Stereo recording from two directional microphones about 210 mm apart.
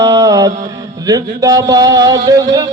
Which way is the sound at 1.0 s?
15° right (ahead or behind).